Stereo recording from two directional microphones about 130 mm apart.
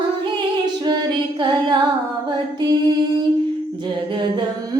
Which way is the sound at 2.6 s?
30° right (ahead or behind).